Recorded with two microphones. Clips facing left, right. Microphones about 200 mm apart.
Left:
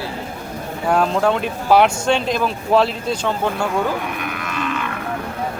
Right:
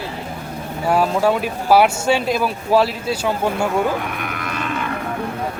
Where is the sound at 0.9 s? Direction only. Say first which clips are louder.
Even; 5° right (ahead or behind).